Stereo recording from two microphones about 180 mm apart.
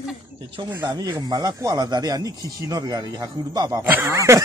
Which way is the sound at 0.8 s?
20° right (ahead or behind).